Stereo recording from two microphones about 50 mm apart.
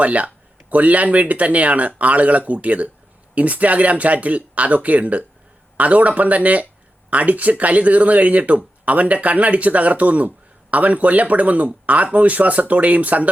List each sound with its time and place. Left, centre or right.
0.0 s speech: right